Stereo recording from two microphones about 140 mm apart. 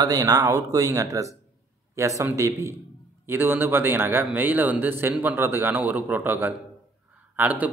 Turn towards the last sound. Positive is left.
turn(degrees=-10)  # may be behind; listen again after turning